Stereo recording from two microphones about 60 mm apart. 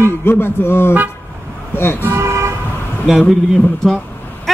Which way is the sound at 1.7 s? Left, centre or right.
Left.